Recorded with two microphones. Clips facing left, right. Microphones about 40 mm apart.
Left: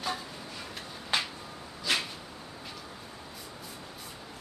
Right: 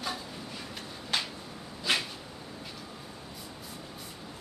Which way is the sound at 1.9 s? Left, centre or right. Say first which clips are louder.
Right 1 dB; centre.